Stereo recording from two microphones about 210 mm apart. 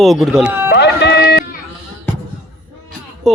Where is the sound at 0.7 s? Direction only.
50° left (ahead or behind).